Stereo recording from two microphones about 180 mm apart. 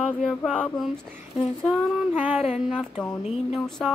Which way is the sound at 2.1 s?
10° right (ahead or behind).